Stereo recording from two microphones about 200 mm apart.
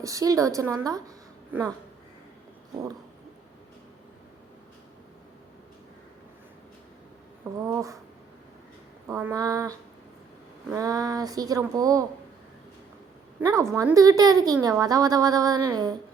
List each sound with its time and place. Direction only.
0.0 s a woman's voice: 15° right (ahead or behind)
7.6 s a woman's voice: 15° right (ahead or behind)
9.0 s a woman's voice: 10° right (ahead or behind)
13.4 s a woman's voice: 15° right (ahead or behind)